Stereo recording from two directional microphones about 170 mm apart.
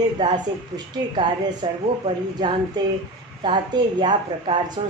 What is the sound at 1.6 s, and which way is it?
Speech, 30° right (ahead or behind).